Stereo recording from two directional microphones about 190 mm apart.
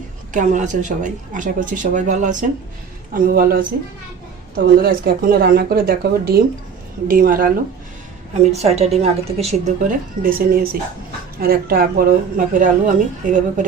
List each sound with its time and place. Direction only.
0.3 s speech: 40° right (ahead or behind)
3.1 s a woman's voice: 50° right (ahead or behind)
8.3 s speech: 35° right (ahead or behind)
10.2 s a woman's voice: 50° right (ahead or behind)